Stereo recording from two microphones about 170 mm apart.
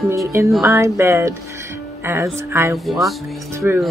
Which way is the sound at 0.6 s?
15° right (ahead or behind).